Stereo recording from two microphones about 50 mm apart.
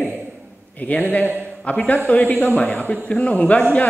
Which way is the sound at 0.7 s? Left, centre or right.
Left.